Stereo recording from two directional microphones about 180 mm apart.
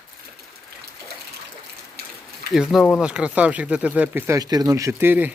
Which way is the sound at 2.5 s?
Centre (ahead or behind).